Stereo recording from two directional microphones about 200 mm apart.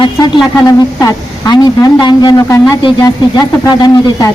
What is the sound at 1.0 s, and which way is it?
Speech, 15° left (ahead or behind).